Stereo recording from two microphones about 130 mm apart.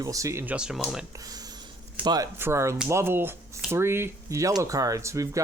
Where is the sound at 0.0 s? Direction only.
25° right (ahead or behind).